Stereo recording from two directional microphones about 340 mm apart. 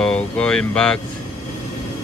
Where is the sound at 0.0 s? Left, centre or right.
Centre.